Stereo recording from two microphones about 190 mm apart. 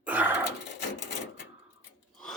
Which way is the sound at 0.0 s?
10° right (ahead or behind).